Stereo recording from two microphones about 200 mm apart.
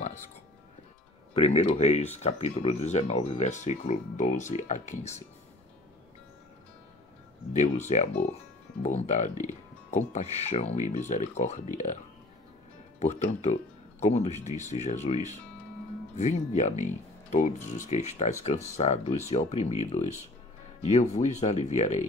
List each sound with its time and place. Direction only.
1.3 s speech: 30° left (ahead or behind)
7.5 s speech: 35° left (ahead or behind)
13.0 s speech: 35° left (ahead or behind)
16.2 s speech: 35° left (ahead or behind)